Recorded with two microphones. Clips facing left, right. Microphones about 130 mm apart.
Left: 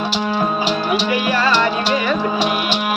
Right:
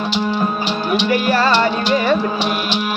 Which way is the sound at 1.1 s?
40° right (ahead or behind).